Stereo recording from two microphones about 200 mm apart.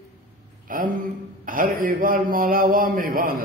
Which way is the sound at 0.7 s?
45° right (ahead or behind).